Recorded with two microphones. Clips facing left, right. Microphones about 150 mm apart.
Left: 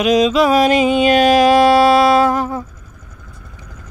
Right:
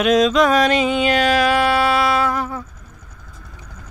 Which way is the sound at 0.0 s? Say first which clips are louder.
Left 2 dB; centre (ahead or behind).